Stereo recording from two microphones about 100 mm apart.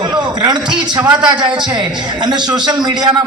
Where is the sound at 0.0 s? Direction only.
45° right (ahead or behind).